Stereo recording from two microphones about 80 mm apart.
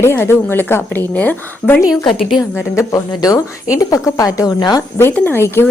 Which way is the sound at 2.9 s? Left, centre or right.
Left.